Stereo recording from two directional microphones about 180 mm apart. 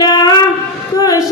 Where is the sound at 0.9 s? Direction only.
20° left (ahead or behind).